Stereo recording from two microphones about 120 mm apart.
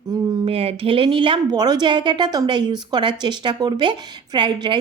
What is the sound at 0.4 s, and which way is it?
A woman's voice, 55° right (ahead or behind).